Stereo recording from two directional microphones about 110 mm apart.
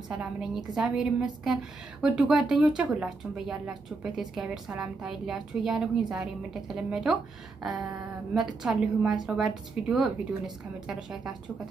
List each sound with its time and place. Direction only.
0.1 s a woman's voice: 5° right (ahead or behind)